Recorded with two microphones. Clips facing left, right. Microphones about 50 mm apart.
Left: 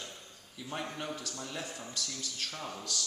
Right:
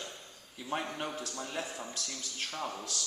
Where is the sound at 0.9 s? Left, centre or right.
Centre.